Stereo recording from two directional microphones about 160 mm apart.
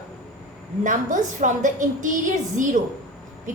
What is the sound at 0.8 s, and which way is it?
A woman's voice, 50° right (ahead or behind).